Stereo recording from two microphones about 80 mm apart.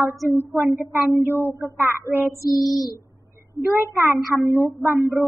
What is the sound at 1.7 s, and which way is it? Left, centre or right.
Speech, right.